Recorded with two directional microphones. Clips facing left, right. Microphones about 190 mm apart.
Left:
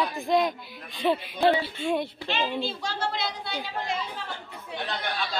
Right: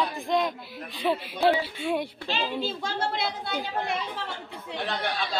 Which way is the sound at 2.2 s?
40° right (ahead or behind).